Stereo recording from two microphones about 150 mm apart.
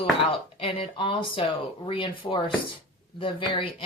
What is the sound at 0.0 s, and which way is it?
Speech, 35° left (ahead or behind).